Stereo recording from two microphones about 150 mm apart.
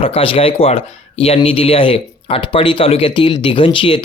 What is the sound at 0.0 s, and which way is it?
Speech, 40° left (ahead or behind).